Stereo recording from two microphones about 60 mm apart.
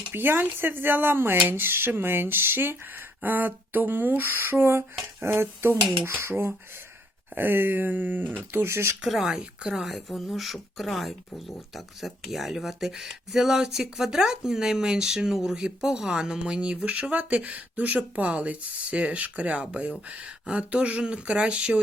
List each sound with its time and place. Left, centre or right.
0.1 s speech: right
8.5 s speech: right
9.0 s speech: centre
9.9 s speech: centre